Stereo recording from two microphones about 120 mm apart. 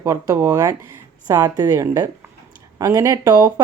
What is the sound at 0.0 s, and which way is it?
Speech, 25° right (ahead or behind).